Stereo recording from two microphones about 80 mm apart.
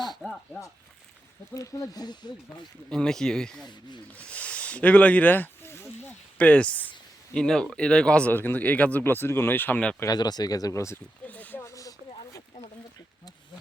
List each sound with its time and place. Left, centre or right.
0.1 s a sound: centre
1.5 s speech: left
2.9 s speech: centre
8.3 s speech: left
10.1 s speech: left
11.3 s speech: left
11.6 s a sound: left